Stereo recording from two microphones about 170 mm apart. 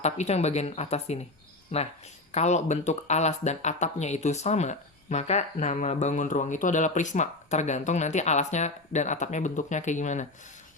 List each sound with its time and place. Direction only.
0.0 s speech: 40° left (ahead or behind)